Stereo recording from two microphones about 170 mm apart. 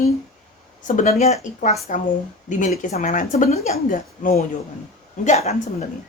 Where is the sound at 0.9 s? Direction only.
45° left (ahead or behind).